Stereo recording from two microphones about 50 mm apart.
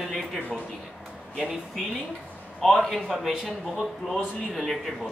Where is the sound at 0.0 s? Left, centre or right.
Centre.